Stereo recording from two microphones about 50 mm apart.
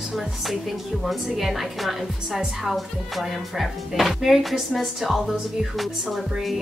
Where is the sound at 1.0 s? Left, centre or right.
Centre.